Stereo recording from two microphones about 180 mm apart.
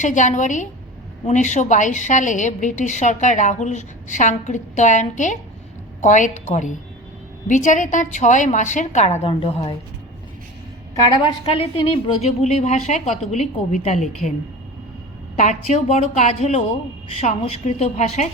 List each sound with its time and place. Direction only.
0.0 s a woman's voice: 45° left (ahead or behind)
11.5 s a woman's voice: 30° left (ahead or behind)
15.4 s a woman's voice: 40° left (ahead or behind)